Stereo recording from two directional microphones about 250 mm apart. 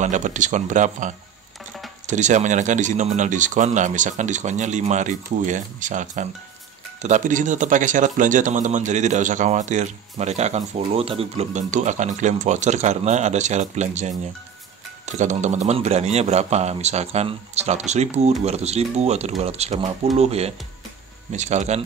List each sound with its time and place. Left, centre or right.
0.0 s speech: right